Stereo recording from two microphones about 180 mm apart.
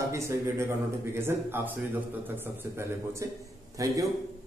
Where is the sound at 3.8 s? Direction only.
20° right (ahead or behind).